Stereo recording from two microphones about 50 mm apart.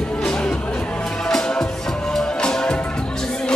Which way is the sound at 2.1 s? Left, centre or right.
Centre.